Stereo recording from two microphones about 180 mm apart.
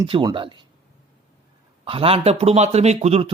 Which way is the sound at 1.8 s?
30° right (ahead or behind).